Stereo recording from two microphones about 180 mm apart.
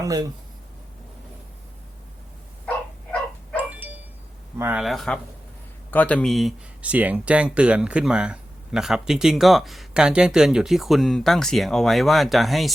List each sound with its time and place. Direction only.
0.0 s speech: 20° right (ahead or behind)
3.7 s bow-wow: 10° right (ahead or behind)
4.5 s speech: 15° right (ahead or behind)
4.8 s speech: centre (ahead or behind)